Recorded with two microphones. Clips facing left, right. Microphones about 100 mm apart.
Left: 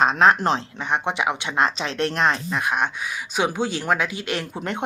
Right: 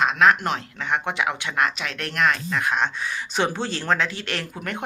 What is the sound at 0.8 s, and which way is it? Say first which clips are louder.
Speech: left 1 dB; 20° left (ahead or behind).